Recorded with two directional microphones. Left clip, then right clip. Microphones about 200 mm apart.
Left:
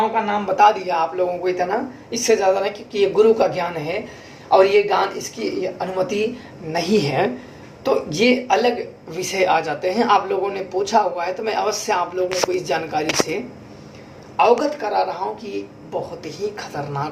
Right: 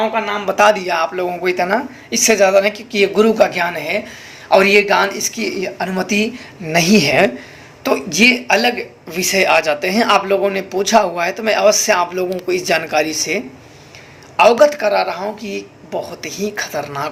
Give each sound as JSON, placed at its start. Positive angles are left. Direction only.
{"t": 0.5, "sound": "a woman's voice", "side_deg": -35}
{"t": 14.6, "sound": "a woman's voice", "side_deg": -35}